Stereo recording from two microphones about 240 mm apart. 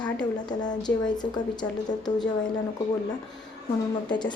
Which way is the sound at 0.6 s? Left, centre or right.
Centre.